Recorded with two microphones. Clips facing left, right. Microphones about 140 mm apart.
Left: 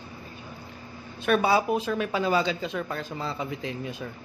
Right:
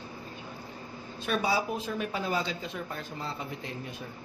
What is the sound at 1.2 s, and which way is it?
A woman's voice, 65° left (ahead or behind).